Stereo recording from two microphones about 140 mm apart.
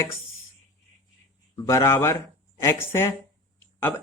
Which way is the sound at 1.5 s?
20° left (ahead or behind).